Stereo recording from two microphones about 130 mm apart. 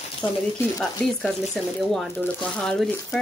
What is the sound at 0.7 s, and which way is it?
Speech, 5° left (ahead or behind).